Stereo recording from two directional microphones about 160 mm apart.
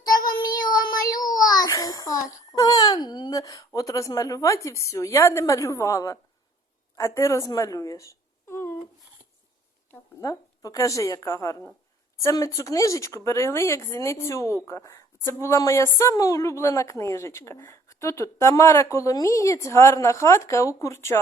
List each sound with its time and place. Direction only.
0.3 s child singing: 25° left (ahead or behind)
6.9 s speech: 20° left (ahead or behind)
9.9 s speech: 20° left (ahead or behind)